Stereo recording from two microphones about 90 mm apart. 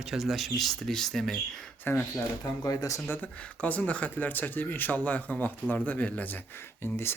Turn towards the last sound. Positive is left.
turn(degrees=25)  # may be behind; listen again after turning